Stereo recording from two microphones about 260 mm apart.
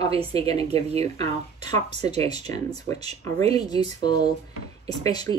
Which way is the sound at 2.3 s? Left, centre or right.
Centre.